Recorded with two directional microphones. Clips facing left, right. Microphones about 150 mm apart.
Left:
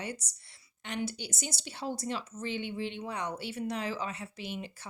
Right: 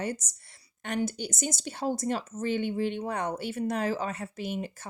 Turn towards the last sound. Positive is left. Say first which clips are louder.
# right 6 dB
turn(degrees=-45)  # may be behind; listen again after turning